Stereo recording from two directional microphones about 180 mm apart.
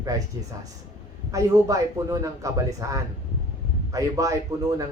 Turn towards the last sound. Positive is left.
turn(degrees=-20)  # may be behind; listen again after turning